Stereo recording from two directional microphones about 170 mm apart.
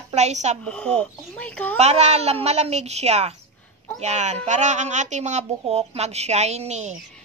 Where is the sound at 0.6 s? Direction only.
5° left (ahead or behind).